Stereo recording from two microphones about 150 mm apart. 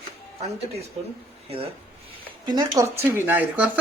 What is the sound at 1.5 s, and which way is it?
Speech, 40° right (ahead or behind).